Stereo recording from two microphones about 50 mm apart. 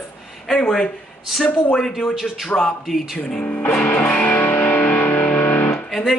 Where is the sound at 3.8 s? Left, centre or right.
Left.